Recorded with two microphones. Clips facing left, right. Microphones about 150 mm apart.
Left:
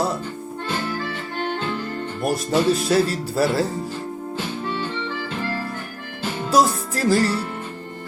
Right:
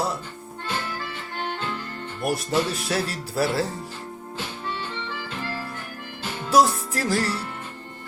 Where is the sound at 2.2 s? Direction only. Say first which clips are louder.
Left 5 dB; 20° left (ahead or behind).